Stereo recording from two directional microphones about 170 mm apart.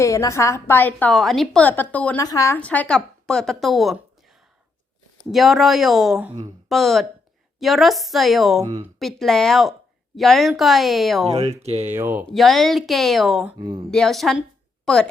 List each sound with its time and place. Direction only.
0.0 s a woman's voice: 20° left (ahead or behind)
2.1 s a woman's voice: 20° left (ahead or behind)
2.6 s a woman's voice: 10° left (ahead or behind)
5.3 s a woman's voice: centre (ahead or behind)
8.6 s speech: 40° right (ahead or behind)
9.0 s a woman's voice: centre (ahead or behind)
11.6 s speech: 35° right (ahead or behind)
11.9 s speech: 10° right (ahead or behind)
12.2 s a woman's voice: centre (ahead or behind)
13.6 s speech: 25° right (ahead or behind)
13.9 s a woman's voice: centre (ahead or behind)